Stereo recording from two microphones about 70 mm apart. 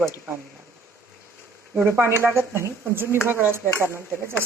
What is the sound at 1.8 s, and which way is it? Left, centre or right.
Speech, right.